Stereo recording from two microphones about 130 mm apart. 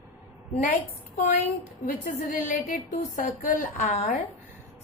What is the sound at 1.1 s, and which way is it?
Speech, 70° left (ahead or behind).